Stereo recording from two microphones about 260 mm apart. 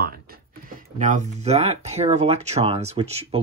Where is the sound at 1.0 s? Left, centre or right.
Right.